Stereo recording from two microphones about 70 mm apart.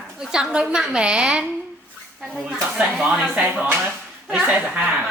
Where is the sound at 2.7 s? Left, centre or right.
Centre.